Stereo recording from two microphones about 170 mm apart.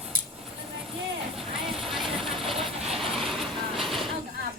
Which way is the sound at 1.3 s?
Centre (ahead or behind).